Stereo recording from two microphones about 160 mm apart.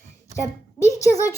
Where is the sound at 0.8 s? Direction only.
20° left (ahead or behind).